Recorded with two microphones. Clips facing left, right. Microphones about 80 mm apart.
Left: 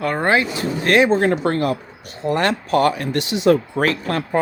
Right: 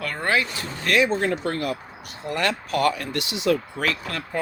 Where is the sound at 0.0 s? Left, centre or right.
Left.